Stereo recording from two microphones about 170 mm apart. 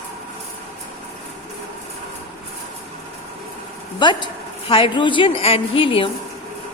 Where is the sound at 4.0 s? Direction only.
25° left (ahead or behind).